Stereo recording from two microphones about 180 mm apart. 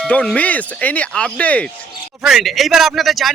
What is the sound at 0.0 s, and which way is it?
Speech, 5° left (ahead or behind).